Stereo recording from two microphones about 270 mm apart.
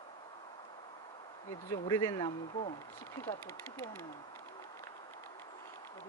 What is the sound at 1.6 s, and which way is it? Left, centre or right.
Speech, centre.